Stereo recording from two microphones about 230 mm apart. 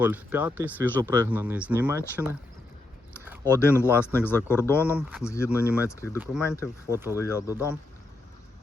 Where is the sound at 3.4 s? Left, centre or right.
Centre.